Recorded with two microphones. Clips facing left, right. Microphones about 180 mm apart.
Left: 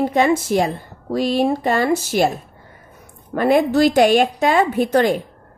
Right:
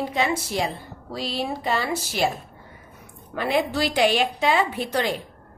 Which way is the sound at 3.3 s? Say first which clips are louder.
Left 8 dB; 50° left (ahead or behind).